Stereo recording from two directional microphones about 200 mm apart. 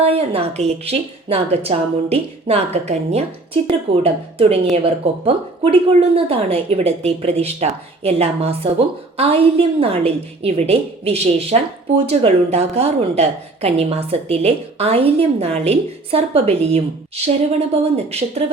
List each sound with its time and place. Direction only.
0.0 s a woman's voice: 30° right (ahead or behind)
17.9 s a woman's voice: 30° right (ahead or behind)